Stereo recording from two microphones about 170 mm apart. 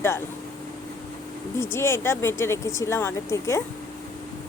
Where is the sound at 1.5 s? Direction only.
15° left (ahead or behind).